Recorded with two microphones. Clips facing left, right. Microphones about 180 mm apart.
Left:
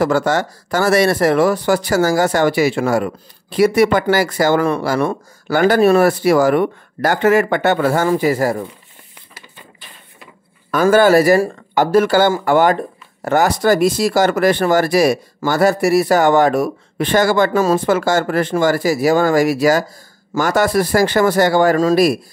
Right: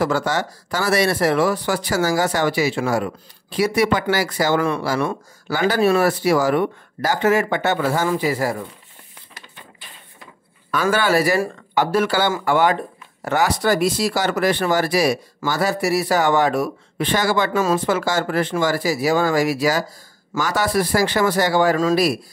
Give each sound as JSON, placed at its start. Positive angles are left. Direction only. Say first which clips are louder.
{"t": 0.0, "sound": "speech", "louder": "left 5 dB", "side_deg": 50}
{"t": 10.7, "sound": "speech", "louder": "left 7 dB", "side_deg": 45}
{"t": 17.5, "sound": "speech", "louder": "left 4 dB", "side_deg": 35}
{"t": 17.8, "sound": "speech", "louder": "left 5 dB", "side_deg": 50}